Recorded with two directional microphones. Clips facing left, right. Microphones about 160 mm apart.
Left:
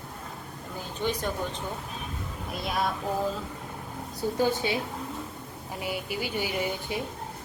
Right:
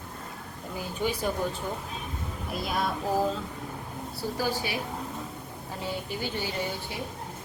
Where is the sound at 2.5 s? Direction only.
Centre (ahead or behind).